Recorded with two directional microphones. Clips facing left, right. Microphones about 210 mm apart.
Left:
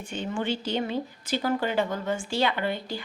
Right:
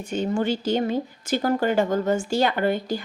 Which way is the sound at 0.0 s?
40° right (ahead or behind).